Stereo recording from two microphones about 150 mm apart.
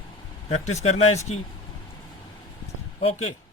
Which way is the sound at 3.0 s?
40° left (ahead or behind).